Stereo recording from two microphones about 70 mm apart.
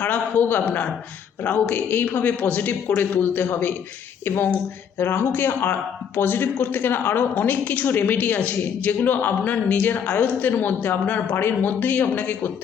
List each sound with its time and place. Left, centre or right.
0.0 s a man's voice: left